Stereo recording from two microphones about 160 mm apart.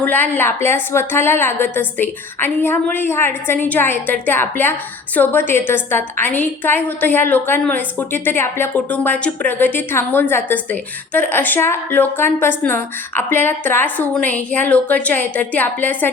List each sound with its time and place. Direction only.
0.0 s a woman's voice: 10° left (ahead or behind)